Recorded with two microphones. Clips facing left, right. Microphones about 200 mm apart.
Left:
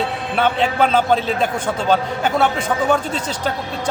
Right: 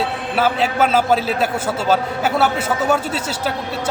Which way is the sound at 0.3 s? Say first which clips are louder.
Even; 5° right (ahead or behind).